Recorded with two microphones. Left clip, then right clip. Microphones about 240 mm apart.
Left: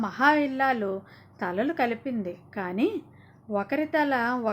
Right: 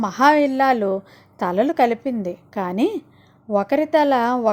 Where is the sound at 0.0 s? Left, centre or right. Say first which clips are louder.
Right 7 dB; right.